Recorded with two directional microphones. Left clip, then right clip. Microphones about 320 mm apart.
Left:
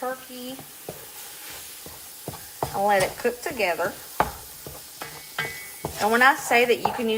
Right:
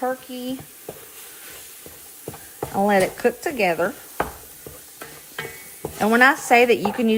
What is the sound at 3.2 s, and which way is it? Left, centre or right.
Speech, right.